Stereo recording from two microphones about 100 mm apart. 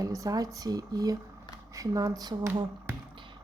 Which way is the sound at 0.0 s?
35° right (ahead or behind).